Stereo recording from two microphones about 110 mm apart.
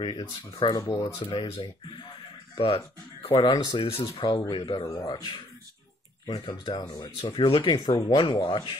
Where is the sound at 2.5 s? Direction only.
60° left (ahead or behind); by 3.8 s 40° left (ahead or behind).